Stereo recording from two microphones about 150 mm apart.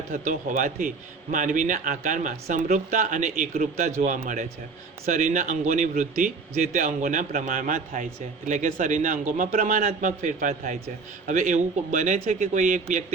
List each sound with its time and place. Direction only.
0.1 s a man's voice: 65° right (ahead or behind)